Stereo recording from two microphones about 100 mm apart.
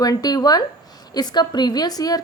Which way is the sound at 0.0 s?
40° left (ahead or behind).